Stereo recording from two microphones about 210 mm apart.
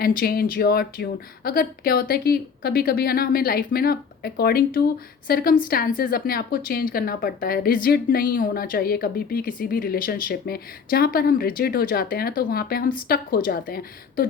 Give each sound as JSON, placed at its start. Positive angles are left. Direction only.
{"t": 0.0, "sound": "a woman's voice", "side_deg": 45}